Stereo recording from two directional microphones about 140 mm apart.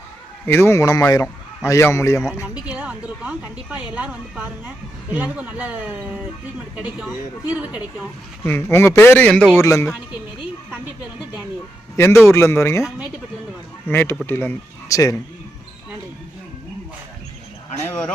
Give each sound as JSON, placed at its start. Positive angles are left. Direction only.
{"t": 0.4, "sound": "a man's voice", "side_deg": 15}
{"t": 2.6, "sound": "a woman's voice", "side_deg": -10}
{"t": 8.4, "sound": "a man's voice", "side_deg": 15}
{"t": 9.6, "sound": "a man's voice", "side_deg": 20}
{"t": 11.9, "sound": "a man's voice", "side_deg": 20}
{"t": 12.8, "sound": "speech", "side_deg": -5}
{"t": 13.8, "sound": "a man's voice", "side_deg": 15}